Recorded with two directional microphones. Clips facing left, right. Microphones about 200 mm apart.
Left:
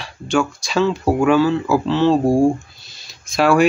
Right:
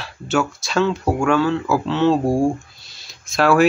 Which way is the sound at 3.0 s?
Centre (ahead or behind).